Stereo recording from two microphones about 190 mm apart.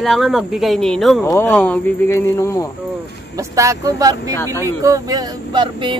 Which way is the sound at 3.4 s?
15° right (ahead or behind).